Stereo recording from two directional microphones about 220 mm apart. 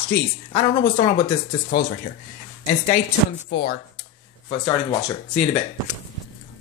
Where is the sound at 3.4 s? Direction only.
50° left (ahead or behind).